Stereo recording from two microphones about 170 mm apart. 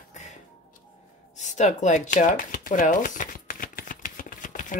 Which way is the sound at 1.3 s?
45° left (ahead or behind).